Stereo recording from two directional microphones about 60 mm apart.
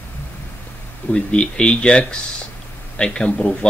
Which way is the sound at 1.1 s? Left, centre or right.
Centre.